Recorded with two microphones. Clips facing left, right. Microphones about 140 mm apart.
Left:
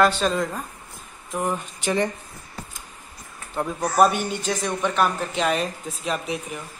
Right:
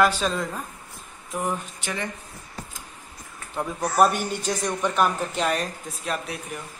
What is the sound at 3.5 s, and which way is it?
Speech, centre (ahead or behind).